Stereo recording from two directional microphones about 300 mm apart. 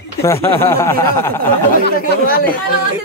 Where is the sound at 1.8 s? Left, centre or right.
Left.